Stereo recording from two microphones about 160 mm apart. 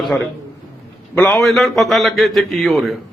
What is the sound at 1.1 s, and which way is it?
Speech, 15° left (ahead or behind).